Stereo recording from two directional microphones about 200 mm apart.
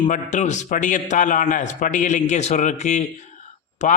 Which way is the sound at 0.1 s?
35° left (ahead or behind).